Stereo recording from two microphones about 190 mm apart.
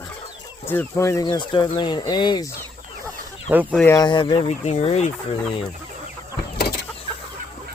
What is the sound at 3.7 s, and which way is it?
Speech, 10° left (ahead or behind).